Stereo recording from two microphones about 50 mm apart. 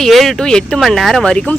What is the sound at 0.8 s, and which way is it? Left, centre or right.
Speech, centre.